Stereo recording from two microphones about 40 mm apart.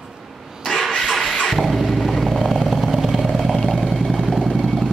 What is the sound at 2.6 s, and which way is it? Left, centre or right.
Vehicle, centre.